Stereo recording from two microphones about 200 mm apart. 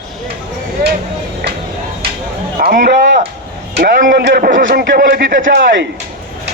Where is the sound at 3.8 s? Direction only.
45° right (ahead or behind).